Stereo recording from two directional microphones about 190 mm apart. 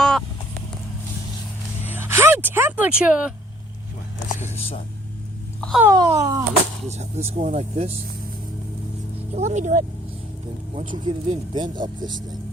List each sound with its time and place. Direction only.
0.0 s vehicle: 5° left (ahead or behind)
1.8 s vehicle: 10° right (ahead or behind)
4.5 s speech: 30° left (ahead or behind)
5.5 s a sound: 5° left (ahead or behind)
5.8 s speech: 20° right (ahead or behind)
6.8 s speech: 35° right (ahead or behind)
9.3 s speech: 35° right (ahead or behind)
10.9 s speech: 25° right (ahead or behind)